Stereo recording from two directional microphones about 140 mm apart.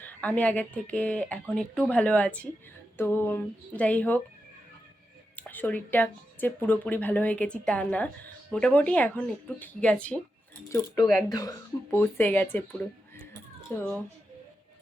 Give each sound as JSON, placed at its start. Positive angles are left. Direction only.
{"t": 0.0, "sound": "speech", "side_deg": 10}
{"t": 5.4, "sound": "speech", "side_deg": 15}
{"t": 10.7, "sound": "speech", "side_deg": 30}
{"t": 13.3, "sound": "a sound", "side_deg": 15}